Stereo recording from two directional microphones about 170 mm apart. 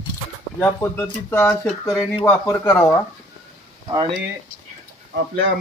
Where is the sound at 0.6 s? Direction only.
15° left (ahead or behind).